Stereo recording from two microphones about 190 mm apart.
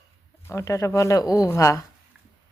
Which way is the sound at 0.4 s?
15° left (ahead or behind).